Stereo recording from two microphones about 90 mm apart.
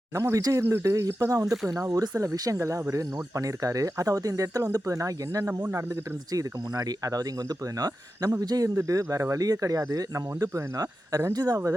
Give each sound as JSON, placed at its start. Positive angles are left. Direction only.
{"t": 0.1, "sound": "speech", "side_deg": -35}